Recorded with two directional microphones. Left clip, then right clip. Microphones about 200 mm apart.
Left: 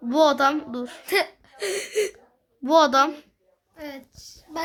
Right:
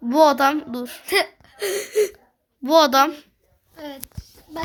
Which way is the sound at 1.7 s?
25° right (ahead or behind).